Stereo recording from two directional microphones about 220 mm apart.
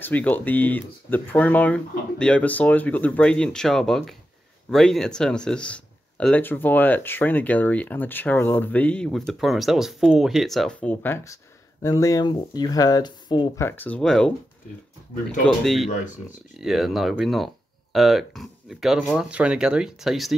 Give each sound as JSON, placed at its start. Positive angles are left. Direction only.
{"t": 0.0, "sound": "speech", "side_deg": 5}
{"t": 15.4, "sound": "speech", "side_deg": 0}